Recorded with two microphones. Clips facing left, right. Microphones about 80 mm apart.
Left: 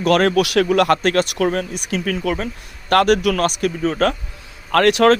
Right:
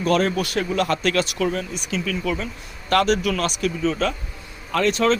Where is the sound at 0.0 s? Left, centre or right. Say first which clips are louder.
Left 5 dB; left.